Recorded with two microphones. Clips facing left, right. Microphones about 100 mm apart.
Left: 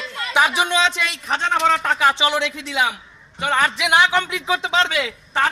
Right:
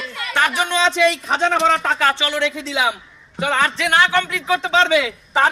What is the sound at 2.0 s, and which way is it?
Speech, 15° left (ahead or behind).